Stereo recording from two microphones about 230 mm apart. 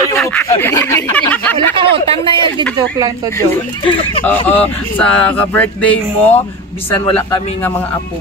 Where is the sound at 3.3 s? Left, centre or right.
Centre.